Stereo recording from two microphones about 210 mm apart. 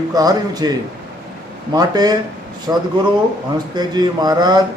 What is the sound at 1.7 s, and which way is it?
A man's voice, 20° right (ahead or behind).